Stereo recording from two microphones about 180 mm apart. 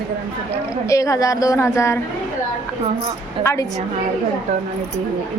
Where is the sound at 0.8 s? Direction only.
20° left (ahead or behind).